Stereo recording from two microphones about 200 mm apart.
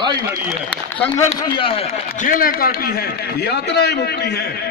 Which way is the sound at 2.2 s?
45° left (ahead or behind).